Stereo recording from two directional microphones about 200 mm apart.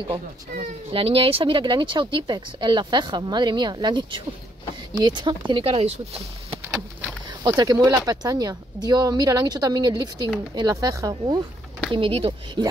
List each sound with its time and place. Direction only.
0.6 s speech: 30° right (ahead or behind)
7.4 s speech: 20° right (ahead or behind)